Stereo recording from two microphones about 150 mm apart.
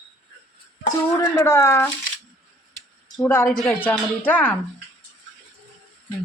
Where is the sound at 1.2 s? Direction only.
20° left (ahead or behind).